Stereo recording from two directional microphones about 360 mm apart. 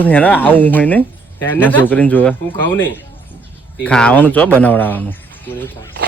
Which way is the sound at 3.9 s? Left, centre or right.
Centre.